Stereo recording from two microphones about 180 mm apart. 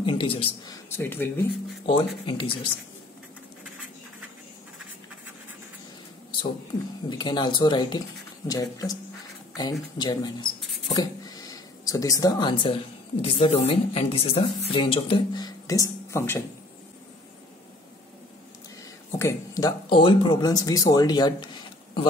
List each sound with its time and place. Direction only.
0.0 s speech: 30° left (ahead or behind)
0.8 s speech: 10° left (ahead or behind)
1.9 s speech: 25° left (ahead or behind)
7.1 s speech: 25° left (ahead or behind)
19.1 s speech: 15° left (ahead or behind)